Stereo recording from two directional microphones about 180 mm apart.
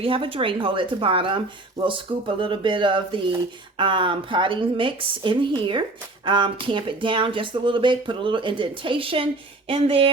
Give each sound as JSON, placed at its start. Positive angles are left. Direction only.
{"t": 0.0, "sound": "speech", "side_deg": -30}